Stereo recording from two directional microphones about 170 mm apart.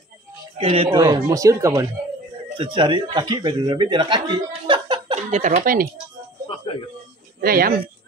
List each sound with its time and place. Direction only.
0.6 s speech: 35° right (ahead or behind)
0.9 s speech: 25° right (ahead or behind)
2.5 s speech: 30° right (ahead or behind); by 5.9 s 55° right (ahead or behind)
6.4 s a sound: 30° left (ahead or behind)
7.4 s speech: 60° right (ahead or behind)